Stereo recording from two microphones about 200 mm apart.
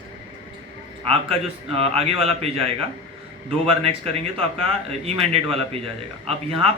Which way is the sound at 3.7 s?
30° right (ahead or behind).